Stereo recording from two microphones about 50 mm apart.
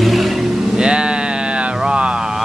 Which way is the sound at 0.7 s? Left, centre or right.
Centre.